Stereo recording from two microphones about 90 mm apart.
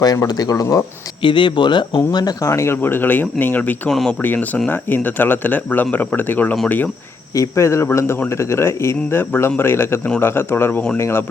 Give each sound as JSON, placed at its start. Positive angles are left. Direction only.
{"t": 0.3, "sound": "speech", "side_deg": 45}
{"t": 1.2, "sound": "speech", "side_deg": 65}
{"t": 2.0, "sound": "speech", "side_deg": 45}
{"t": 2.5, "sound": "speech", "side_deg": 30}
{"t": 3.8, "sound": "speech", "side_deg": 5}
{"t": 4.2, "sound": "speech", "side_deg": 20}
{"t": 7.3, "sound": "speech", "side_deg": 35}